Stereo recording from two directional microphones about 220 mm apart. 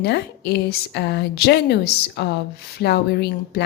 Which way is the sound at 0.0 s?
50° left (ahead or behind).